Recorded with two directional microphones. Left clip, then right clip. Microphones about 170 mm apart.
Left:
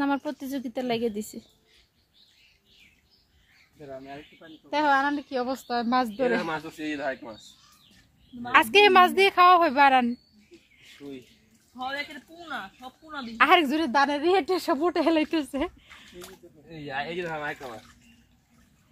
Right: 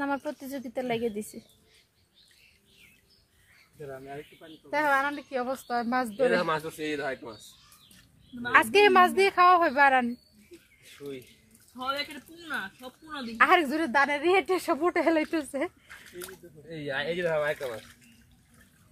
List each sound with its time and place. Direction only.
0.0 s a woman's voice: 40° left (ahead or behind)
3.9 s speech: 10° right (ahead or behind)
4.6 s a woman's voice: 40° left (ahead or behind)
6.6 s speech: centre (ahead or behind)
8.5 s a woman's voice: 40° left (ahead or behind)
11.0 s speech: 20° right (ahead or behind)
13.4 s a woman's voice: 40° left (ahead or behind)
16.2 s speech: 25° right (ahead or behind)